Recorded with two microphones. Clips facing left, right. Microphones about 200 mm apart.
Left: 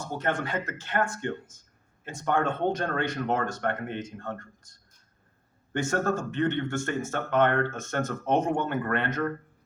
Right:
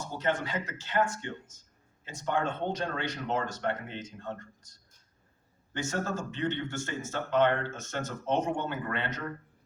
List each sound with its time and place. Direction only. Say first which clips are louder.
0.0 s speech: left 2 dB; 55° left (ahead or behind)
5.7 s speech: left 6 dB; 55° left (ahead or behind)